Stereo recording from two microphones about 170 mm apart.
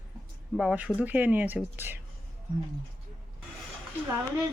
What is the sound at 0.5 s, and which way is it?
Speech, 5° right (ahead or behind).